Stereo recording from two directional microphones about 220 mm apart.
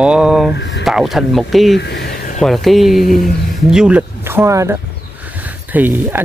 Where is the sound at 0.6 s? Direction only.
50° left (ahead or behind).